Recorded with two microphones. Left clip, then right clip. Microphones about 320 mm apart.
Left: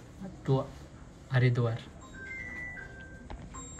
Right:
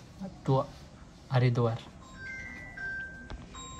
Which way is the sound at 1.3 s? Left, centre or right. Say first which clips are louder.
Right 2 dB; centre.